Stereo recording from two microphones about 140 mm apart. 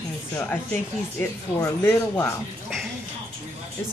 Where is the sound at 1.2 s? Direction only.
20° left (ahead or behind).